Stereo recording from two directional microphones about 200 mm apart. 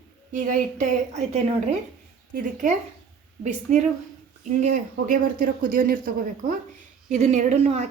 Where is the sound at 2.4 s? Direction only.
40° right (ahead or behind).